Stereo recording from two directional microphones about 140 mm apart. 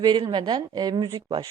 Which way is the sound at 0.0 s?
30° right (ahead or behind).